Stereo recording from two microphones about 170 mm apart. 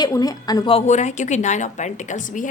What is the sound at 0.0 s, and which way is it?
A woman's voice, 20° left (ahead or behind).